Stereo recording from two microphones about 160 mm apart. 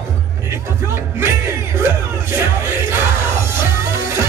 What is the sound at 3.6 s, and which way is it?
Music, 15° right (ahead or behind).